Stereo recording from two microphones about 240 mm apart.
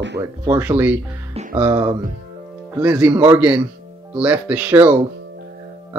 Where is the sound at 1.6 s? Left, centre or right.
Centre.